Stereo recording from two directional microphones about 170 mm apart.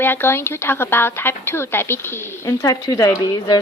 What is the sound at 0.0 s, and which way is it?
A woman's voice, 15° left (ahead or behind).